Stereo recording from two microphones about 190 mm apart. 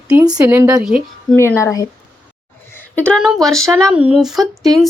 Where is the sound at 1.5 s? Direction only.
15° left (ahead or behind).